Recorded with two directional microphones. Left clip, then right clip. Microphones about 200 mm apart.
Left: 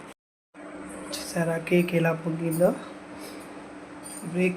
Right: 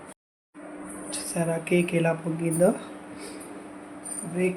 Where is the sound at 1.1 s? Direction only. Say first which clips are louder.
Even; 10° right (ahead or behind).